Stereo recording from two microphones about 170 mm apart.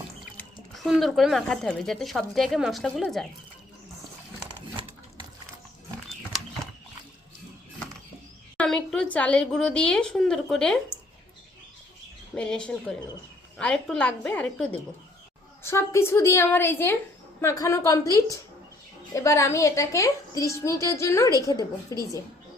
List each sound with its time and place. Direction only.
0.3 s speech: centre (ahead or behind)
8.5 s speech: 5° left (ahead or behind)
12.3 s a woman's voice: 5° left (ahead or behind)